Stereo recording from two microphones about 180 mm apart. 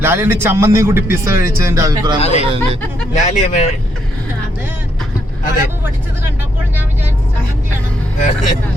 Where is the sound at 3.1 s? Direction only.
40° left (ahead or behind).